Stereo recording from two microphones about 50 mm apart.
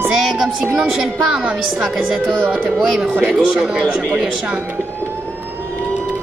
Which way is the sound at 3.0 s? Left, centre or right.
Right.